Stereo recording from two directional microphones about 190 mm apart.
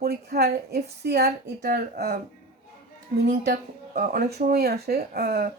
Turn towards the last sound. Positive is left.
turn(degrees=-55)  # may be behind; listen again after turning